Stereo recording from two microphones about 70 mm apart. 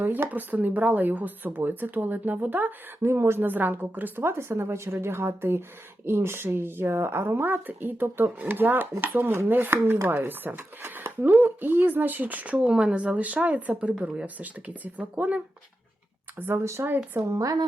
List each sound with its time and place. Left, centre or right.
0.0 s speech: right
4.2 s speech: right
16.5 s speech: right
17.2 s a woman's voice: right